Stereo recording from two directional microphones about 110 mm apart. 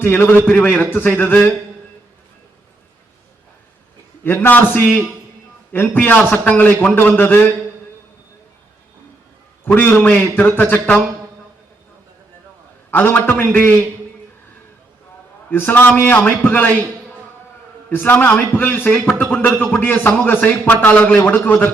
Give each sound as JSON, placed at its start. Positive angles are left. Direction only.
{"t": 0.0, "sound": "a man's voice", "side_deg": 20}
{"t": 4.2, "sound": "a man's voice", "side_deg": 20}
{"t": 9.6, "sound": "a man's voice", "side_deg": 20}
{"t": 12.9, "sound": "a man's voice", "side_deg": 20}
{"t": 15.4, "sound": "a man's voice", "side_deg": 15}
{"t": 17.8, "sound": "a man's voice", "side_deg": 15}